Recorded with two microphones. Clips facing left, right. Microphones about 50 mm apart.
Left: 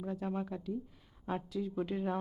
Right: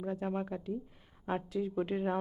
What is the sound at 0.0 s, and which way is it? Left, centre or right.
Speech, centre.